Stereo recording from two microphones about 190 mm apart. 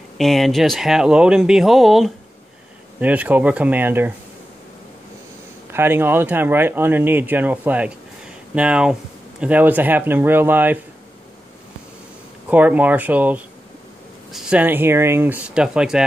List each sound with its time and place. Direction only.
0.2 s speech: centre (ahead or behind)
5.7 s speech: 10° right (ahead or behind)
12.4 s speech: 10° right (ahead or behind)